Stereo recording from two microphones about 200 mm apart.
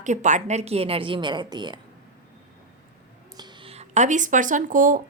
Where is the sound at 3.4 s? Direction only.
20° right (ahead or behind); by 5.0 s 40° right (ahead or behind).